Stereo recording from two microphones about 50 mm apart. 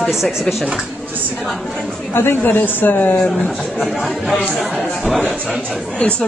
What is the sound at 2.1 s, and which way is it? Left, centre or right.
Speech, left.